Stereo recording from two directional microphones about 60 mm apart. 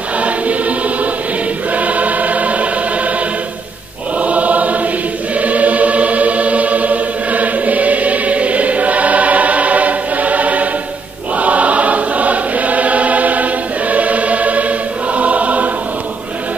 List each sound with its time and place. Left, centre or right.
0.2 s choir: right
4.2 s choir: right